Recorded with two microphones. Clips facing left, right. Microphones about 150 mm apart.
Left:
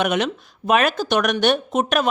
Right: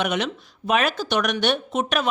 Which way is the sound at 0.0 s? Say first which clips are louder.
Left 4 dB; 50° left (ahead or behind).